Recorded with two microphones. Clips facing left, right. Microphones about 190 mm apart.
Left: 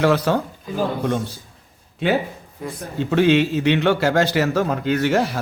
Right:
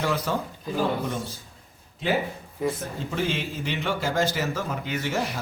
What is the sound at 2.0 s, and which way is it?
A man's voice, 70° left (ahead or behind).